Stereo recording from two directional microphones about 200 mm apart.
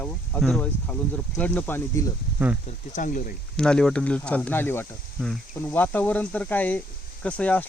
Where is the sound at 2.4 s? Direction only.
10° right (ahead or behind).